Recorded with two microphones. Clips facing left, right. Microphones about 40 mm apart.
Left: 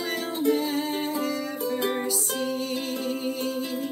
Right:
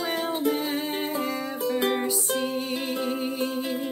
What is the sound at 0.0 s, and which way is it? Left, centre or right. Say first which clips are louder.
Music: even; right.